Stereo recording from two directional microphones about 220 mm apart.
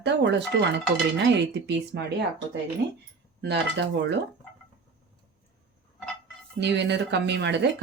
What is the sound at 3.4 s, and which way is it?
Speech, 50° right (ahead or behind).